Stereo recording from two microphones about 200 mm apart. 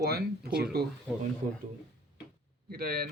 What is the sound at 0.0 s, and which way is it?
Speech, 50° right (ahead or behind).